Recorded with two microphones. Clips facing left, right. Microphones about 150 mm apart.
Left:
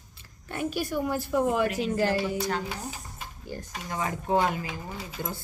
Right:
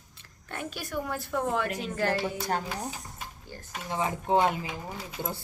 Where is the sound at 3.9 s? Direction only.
25° right (ahead or behind).